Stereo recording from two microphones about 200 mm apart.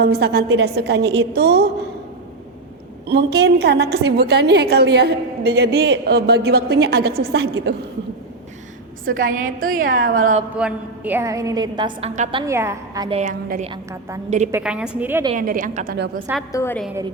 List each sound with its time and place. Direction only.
0.0 s a woman's voice: 55° right (ahead or behind)
3.1 s a woman's voice: 55° right (ahead or behind)
9.2 s a woman's voice: 45° right (ahead or behind)
10.6 s a woman's voice: 5° right (ahead or behind); by 12.3 s 35° right (ahead or behind)
12.3 s a woman's voice: 25° right (ahead or behind)
13.1 s a woman's voice: 30° right (ahead or behind)
14.5 s a woman's voice: 5° right (ahead or behind)
15.4 s a woman's voice: 45° right (ahead or behind)
16.5 s a woman's voice: 15° left (ahead or behind)